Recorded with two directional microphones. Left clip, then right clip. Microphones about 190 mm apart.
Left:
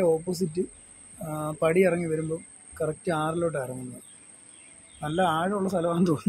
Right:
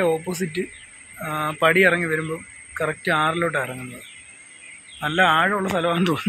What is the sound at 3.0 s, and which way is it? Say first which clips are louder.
Speech: right 8 dB; centre (ahead or behind).